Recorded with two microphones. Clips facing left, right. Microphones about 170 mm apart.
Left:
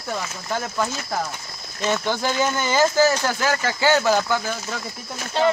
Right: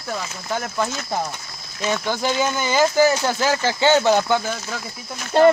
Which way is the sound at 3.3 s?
25° right (ahead or behind).